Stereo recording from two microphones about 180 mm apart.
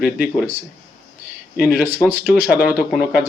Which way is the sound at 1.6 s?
5° right (ahead or behind).